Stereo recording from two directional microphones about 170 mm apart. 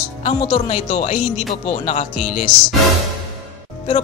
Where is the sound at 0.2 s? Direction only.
30° left (ahead or behind).